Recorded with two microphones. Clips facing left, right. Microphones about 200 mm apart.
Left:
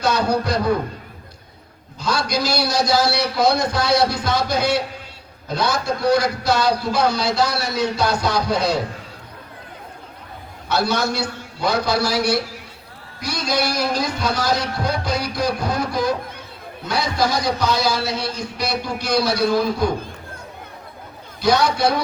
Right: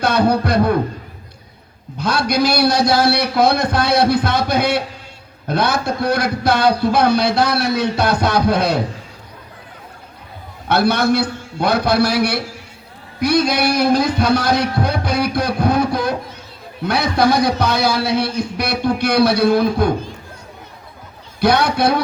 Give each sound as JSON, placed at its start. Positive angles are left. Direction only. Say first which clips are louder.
{"t": 0.0, "sound": "a man's voice", "louder": "right 4 dB", "side_deg": -60}
{"t": 2.0, "sound": "a man's voice", "louder": "right 5 dB", "side_deg": -60}
{"t": 10.7, "sound": "a man's voice", "louder": "right 6 dB", "side_deg": -60}
{"t": 21.4, "sound": "a man's voice", "louder": "right 2 dB", "side_deg": -60}